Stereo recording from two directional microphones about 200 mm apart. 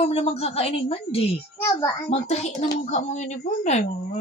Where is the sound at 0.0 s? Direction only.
30° left (ahead or behind).